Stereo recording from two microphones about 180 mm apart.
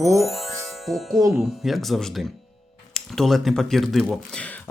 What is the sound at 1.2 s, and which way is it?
Speech, 15° right (ahead or behind).